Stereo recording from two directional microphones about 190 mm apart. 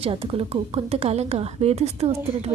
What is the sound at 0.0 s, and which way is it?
Speech, 30° right (ahead or behind).